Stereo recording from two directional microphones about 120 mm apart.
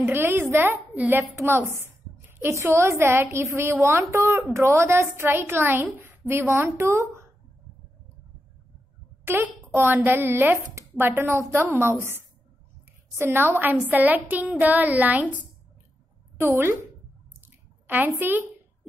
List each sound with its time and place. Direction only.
0.0 s a woman's voice: 20° right (ahead or behind)
9.2 s a woman's voice: 15° right (ahead or behind)
16.3 s a woman's voice: 20° right (ahead or behind)
17.4 s drip: 15° right (ahead or behind)